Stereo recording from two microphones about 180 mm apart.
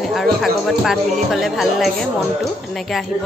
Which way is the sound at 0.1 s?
Centre (ahead or behind).